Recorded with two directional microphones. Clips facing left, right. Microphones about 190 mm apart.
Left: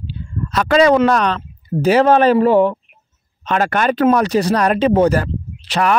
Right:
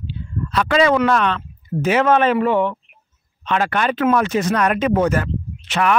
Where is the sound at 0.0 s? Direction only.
40° left (ahead or behind).